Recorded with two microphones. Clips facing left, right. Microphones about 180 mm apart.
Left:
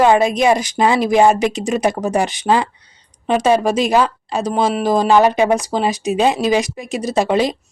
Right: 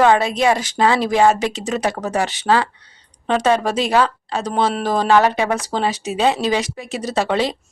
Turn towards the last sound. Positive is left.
turn(degrees=15)  # may be behind; listen again after turning